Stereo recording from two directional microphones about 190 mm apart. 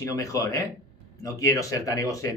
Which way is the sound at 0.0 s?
15° left (ahead or behind).